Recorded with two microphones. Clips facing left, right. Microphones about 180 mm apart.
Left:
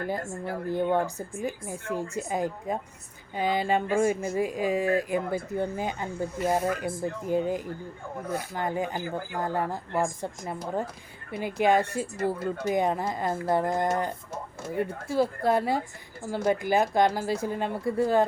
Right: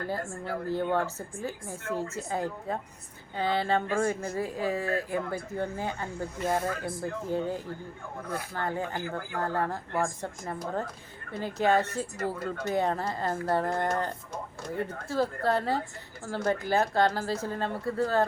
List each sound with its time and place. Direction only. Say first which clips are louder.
0.0 s speech: left 2 dB; 15° left (ahead or behind)